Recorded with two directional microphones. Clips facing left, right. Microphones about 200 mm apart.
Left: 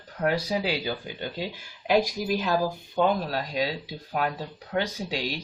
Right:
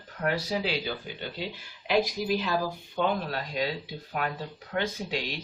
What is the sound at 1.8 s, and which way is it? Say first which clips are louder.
Speech: left 2 dB; 45° left (ahead or behind).